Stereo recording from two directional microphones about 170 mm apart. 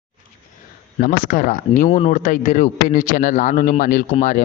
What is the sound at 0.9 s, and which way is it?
Speech, 55° left (ahead or behind).